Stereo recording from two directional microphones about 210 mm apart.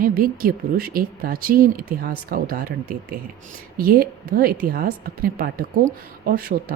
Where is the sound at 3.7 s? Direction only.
45° right (ahead or behind).